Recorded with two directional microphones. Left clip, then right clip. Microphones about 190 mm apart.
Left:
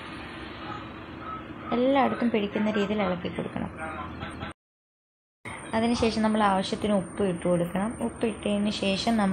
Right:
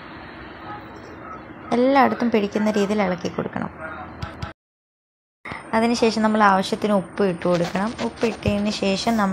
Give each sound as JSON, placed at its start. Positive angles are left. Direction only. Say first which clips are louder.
{"t": 1.7, "sound": "a woman's voice", "louder": "right 7 dB", "side_deg": -15}
{"t": 5.7, "sound": "a woman's voice", "louder": "right 7 dB", "side_deg": -20}